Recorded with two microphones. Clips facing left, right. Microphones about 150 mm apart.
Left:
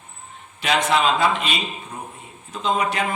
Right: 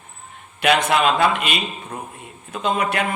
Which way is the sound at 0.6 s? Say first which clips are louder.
Right 5 dB; 60° right (ahead or behind).